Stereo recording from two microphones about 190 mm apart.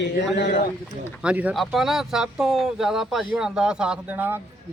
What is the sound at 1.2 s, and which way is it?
A man's voice, 5° right (ahead or behind).